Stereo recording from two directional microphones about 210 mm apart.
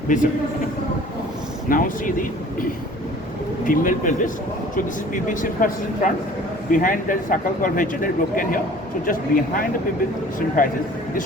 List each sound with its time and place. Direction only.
0.1 s a man's voice: 40° left (ahead or behind)
1.7 s a man's voice: 40° left (ahead or behind)
3.7 s a man's voice: 40° left (ahead or behind)